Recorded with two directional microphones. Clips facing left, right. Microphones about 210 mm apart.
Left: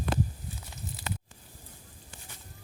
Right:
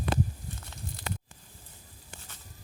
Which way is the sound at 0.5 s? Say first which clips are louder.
Left 1 dB; 10° left (ahead or behind).